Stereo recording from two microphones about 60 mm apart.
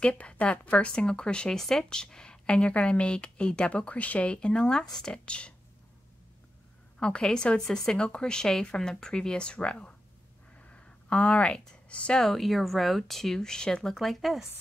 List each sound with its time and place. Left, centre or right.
0.1 s speech: left
7.0 s speech: centre
10.7 s a sound: centre
12.2 s speech: centre